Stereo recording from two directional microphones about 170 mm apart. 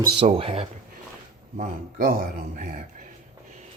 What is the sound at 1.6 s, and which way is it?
Speech, 55° right (ahead or behind).